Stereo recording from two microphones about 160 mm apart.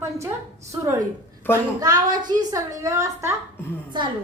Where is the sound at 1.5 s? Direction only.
10° left (ahead or behind).